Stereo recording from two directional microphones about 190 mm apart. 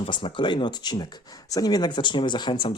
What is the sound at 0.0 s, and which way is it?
Speech, 30° left (ahead or behind).